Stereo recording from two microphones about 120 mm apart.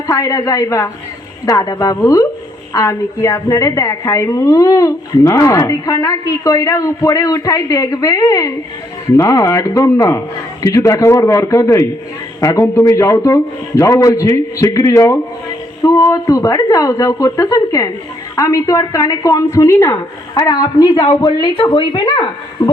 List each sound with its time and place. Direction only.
0.1 s a woman's voice: 30° left (ahead or behind)